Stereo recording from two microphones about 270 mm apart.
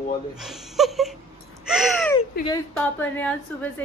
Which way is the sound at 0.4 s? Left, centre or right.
Centre.